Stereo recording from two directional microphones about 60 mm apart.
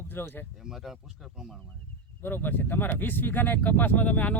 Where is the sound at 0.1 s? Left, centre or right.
Left.